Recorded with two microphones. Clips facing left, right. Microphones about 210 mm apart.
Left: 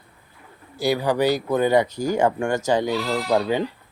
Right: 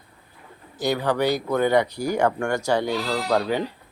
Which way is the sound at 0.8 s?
10° left (ahead or behind).